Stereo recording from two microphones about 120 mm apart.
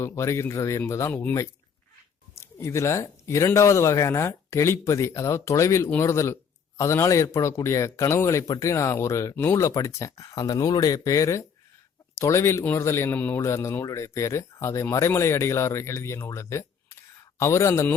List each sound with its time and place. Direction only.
0.0 s a man's voice: 20° left (ahead or behind)
2.3 s a man's voice: 20° left (ahead or behind)